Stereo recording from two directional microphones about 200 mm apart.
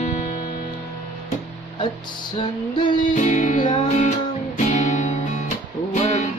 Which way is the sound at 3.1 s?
40° left (ahead or behind).